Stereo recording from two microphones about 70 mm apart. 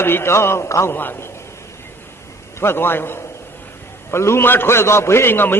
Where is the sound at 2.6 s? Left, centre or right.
Left.